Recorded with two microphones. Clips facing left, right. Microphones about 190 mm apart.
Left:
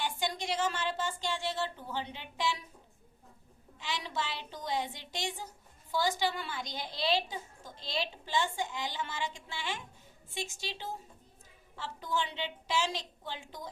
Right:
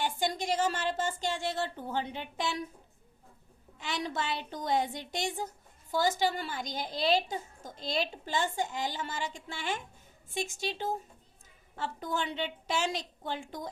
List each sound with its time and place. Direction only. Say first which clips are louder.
0.0 s a woman's voice: right 3 dB; 45° right (ahead or behind)
3.8 s a woman's voice: right 3 dB; 50° right (ahead or behind)